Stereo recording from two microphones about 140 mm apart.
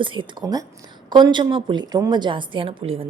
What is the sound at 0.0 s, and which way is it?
A woman's voice, 35° right (ahead or behind).